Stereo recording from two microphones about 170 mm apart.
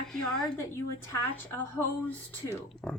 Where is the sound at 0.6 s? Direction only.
15° left (ahead or behind).